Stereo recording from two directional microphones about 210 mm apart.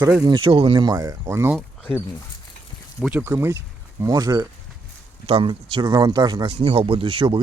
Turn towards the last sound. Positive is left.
turn(degrees=-25)  # may be behind; listen again after turning